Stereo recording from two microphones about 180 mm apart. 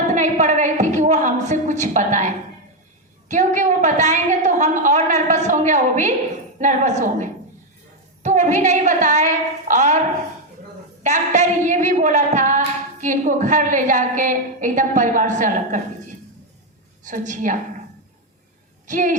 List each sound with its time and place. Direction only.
0.1 s a sound: 40° right (ahead or behind)
3.2 s a woman's voice: 45° right (ahead or behind)
11.0 s a woman's voice: 40° right (ahead or behind)
17.0 s a woman's voice: 45° right (ahead or behind)
18.9 s a woman's voice: 45° right (ahead or behind)